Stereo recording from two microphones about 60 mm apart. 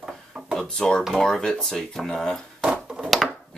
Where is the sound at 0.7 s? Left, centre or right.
Centre.